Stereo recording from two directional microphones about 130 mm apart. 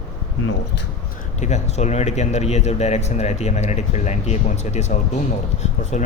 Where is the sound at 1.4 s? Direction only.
60° left (ahead or behind).